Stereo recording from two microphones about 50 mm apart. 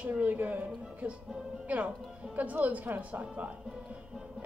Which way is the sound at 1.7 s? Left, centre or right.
Right.